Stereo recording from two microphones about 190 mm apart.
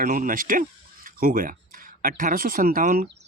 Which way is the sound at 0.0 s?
45° right (ahead or behind).